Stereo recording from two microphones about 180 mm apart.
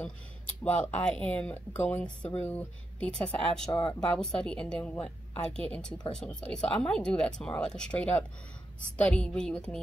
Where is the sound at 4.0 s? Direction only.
5° left (ahead or behind).